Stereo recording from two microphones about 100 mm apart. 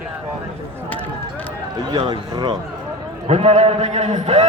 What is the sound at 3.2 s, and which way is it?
Speech, 90° right.